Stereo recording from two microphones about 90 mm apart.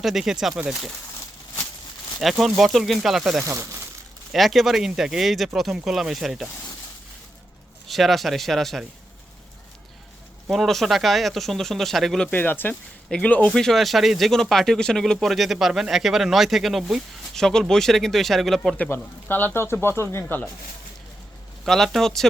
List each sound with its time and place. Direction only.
0.0 s speech: 5° right (ahead or behind)
2.4 s speech: centre (ahead or behind)
3.4 s speech: 35° right (ahead or behind)
4.3 s speech: centre (ahead or behind)
7.9 s speech: centre (ahead or behind)
10.5 s speech: centre (ahead or behind)
12.3 s speech: 20° left (ahead or behind)
13.5 s speech: 5° left (ahead or behind)
18.9 s speech: 20° left (ahead or behind)
21.6 s speech: centre (ahead or behind)